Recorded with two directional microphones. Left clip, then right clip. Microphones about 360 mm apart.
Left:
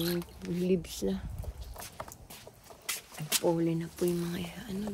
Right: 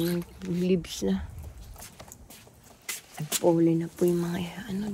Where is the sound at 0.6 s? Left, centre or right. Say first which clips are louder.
Right 3 dB; right.